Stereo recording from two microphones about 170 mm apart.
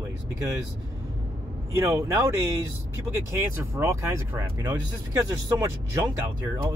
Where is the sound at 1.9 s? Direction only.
15° right (ahead or behind).